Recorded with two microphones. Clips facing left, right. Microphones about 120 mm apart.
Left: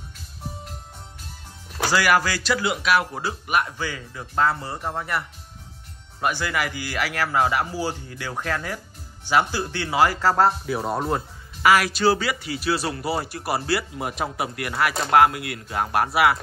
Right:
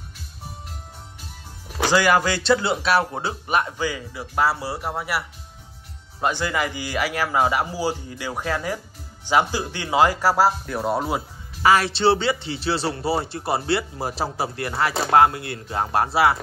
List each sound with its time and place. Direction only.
1.9 s speech: 20° right (ahead or behind)
3.7 s a man's voice: 15° right (ahead or behind)
6.2 s a man's voice: 20° right (ahead or behind); by 11.2 s 5° right (ahead or behind)
11.6 s speech: 30° right (ahead or behind)